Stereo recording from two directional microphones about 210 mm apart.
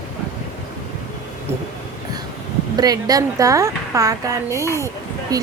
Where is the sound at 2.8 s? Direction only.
20° right (ahead or behind).